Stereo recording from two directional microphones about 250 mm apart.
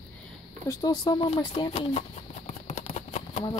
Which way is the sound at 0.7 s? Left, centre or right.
Centre.